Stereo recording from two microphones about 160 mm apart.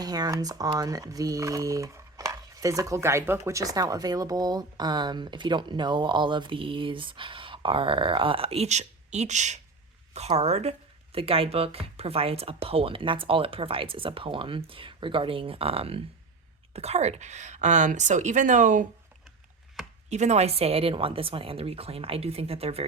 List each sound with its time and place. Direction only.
0.0 s speech: 25° right (ahead or behind); by 18.9 s 55° right (ahead or behind)
20.1 s speech: 45° right (ahead or behind)